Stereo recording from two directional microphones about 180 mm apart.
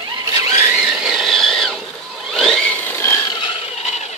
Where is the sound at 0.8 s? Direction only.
Centre (ahead or behind); by 3.3 s 15° left (ahead or behind).